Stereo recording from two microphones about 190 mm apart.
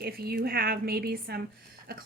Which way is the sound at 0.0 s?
55° right (ahead or behind).